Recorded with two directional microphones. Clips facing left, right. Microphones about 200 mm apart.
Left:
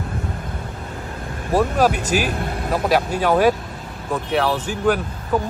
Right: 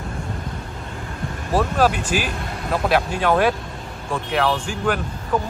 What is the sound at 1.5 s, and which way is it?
Vehicle, 15° left (ahead or behind).